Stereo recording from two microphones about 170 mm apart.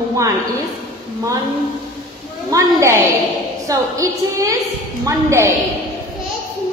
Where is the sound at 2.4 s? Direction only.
15° right (ahead or behind).